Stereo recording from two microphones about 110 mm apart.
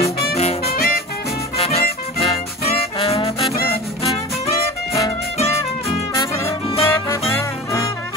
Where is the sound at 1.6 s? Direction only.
70° left (ahead or behind).